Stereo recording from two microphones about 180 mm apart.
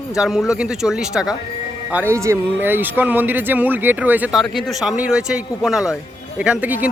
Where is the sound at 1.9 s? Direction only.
15° right (ahead or behind).